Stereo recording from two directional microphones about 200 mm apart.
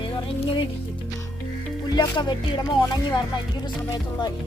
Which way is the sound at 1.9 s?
20° left (ahead or behind).